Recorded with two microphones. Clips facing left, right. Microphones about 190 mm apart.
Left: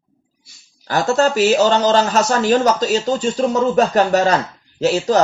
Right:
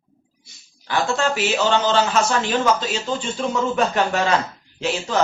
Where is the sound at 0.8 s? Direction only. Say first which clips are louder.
Left 5 dB; 40° left (ahead or behind).